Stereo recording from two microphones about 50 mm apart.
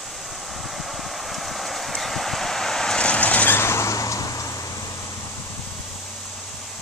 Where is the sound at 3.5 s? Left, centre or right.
Left.